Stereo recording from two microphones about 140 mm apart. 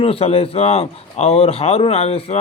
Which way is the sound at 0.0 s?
45° left (ahead or behind).